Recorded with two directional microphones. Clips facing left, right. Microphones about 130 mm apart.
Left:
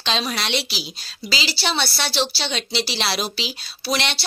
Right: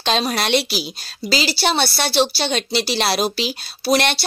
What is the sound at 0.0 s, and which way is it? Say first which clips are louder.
A woman's voice: right 5 dB; 50° right (ahead or behind).